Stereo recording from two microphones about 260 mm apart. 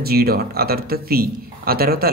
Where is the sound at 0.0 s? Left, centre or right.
Right.